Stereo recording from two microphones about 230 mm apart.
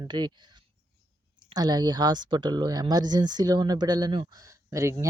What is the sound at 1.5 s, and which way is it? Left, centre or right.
Speech, centre.